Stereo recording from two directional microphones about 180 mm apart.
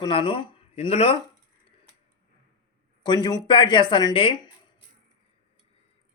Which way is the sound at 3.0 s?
25° left (ahead or behind).